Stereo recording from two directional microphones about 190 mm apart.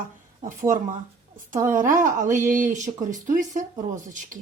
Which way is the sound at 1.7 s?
45° right (ahead or behind).